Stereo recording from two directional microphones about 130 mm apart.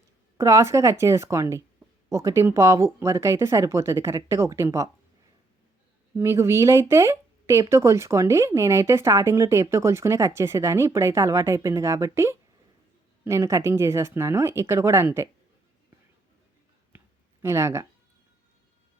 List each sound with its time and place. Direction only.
0.3 s speech: 20° right (ahead or behind)
6.1 s speech: 20° right (ahead or behind)
17.4 s speech: 20° right (ahead or behind)